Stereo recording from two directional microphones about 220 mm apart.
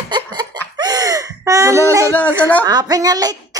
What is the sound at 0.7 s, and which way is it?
Gasp, 15° right (ahead or behind).